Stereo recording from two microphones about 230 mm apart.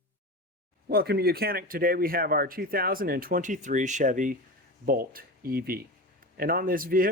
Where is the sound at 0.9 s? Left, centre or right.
Right.